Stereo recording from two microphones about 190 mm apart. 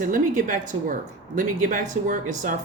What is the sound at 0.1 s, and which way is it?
A woman's voice, 45° right (ahead or behind).